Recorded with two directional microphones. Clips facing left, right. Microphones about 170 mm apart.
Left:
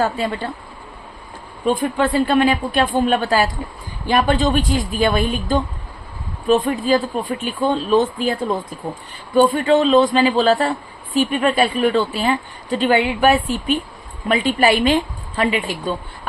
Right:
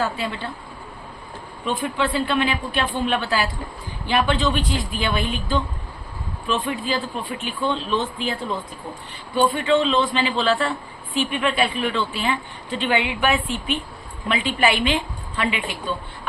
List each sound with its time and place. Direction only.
0.0 s speech: 45° left (ahead or behind)
1.6 s speech: 45° left (ahead or behind)